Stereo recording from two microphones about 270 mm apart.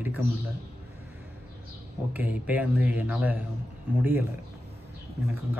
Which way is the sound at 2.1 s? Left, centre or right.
Centre.